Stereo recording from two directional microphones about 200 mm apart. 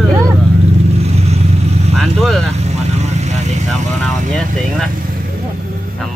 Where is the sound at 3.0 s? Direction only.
35° right (ahead or behind).